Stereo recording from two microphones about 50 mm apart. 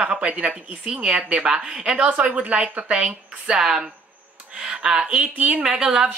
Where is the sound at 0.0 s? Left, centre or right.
Centre.